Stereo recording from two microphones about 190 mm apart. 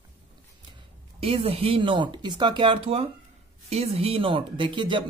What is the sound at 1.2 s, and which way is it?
Speech, 30° right (ahead or behind).